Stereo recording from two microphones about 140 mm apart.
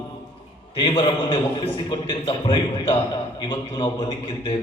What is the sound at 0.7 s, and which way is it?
Speech, 35° left (ahead or behind).